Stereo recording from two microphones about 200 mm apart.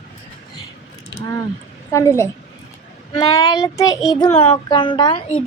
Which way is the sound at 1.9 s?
15° left (ahead or behind).